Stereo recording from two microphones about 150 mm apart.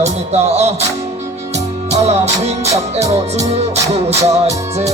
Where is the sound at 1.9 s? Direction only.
45° right (ahead or behind).